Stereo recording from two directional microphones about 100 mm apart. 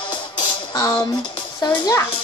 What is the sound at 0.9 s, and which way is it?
Speech, 50° left (ahead or behind).